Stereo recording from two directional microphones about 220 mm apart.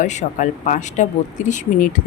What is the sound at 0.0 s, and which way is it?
Speech, 35° left (ahead or behind).